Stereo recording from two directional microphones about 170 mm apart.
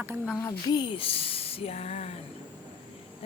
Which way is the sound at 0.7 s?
25° left (ahead or behind).